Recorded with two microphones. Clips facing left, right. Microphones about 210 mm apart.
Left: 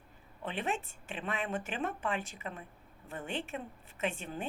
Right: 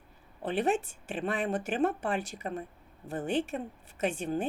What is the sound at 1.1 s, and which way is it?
Speech, 35° right (ahead or behind).